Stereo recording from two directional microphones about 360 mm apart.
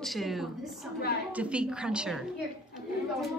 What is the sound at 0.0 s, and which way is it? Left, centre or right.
A woman's voice, centre.